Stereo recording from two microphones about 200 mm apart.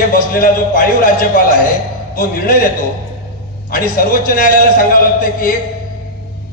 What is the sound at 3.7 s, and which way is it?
A man's voice, 45° left (ahead or behind).